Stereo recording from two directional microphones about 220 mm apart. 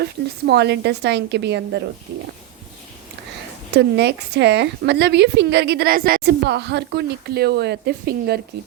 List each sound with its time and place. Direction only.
0.0 s a woman's voice: 50° right (ahead or behind)
3.7 s a woman's voice: 50° right (ahead or behind)